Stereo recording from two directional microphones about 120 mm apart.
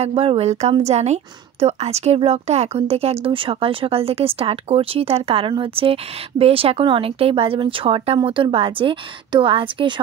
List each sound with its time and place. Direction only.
0.0 s a woman's voice: 55° right (ahead or behind)